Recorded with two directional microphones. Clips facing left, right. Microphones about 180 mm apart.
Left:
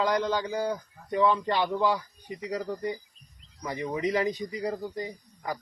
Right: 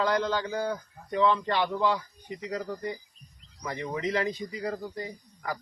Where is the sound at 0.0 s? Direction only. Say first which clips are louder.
Left 1 dB; 15° left (ahead or behind).